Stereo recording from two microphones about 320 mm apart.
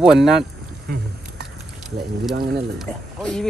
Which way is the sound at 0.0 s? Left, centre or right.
Centre.